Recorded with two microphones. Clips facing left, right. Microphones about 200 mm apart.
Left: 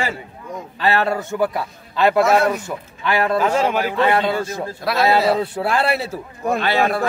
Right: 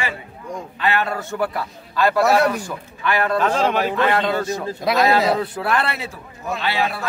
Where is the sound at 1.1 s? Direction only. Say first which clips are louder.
Left 3 dB; 20° left (ahead or behind).